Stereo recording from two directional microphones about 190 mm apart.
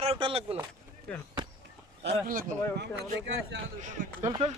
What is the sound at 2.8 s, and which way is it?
Speech, 60° right (ahead or behind).